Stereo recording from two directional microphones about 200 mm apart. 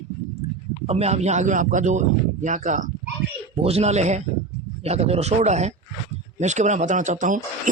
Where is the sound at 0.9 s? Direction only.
30° right (ahead or behind).